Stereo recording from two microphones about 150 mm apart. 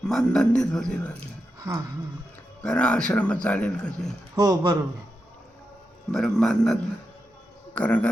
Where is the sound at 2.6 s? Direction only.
5° left (ahead or behind).